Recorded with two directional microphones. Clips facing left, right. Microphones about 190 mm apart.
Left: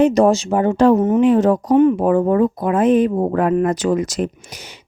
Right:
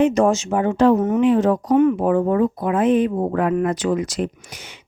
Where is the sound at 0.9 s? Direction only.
30° left (ahead or behind).